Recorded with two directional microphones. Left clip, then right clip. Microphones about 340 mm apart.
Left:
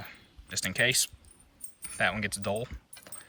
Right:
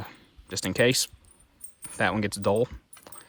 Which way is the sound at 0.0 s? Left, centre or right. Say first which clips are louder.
Right 3 dB; centre.